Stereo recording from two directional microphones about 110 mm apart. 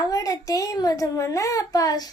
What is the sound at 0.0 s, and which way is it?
A child's voice, 35° left (ahead or behind).